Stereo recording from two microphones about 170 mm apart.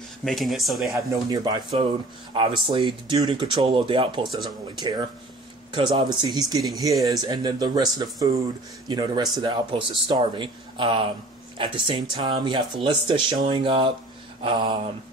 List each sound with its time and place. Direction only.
0.2 s speech: centre (ahead or behind)
1.3 s a man's voice: 25° right (ahead or behind)
14.4 s a sound: 30° right (ahead or behind)